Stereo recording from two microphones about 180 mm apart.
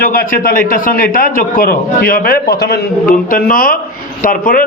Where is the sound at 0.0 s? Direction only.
55° left (ahead or behind).